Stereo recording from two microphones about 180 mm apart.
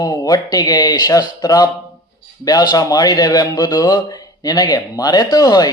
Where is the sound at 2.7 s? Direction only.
20° left (ahead or behind).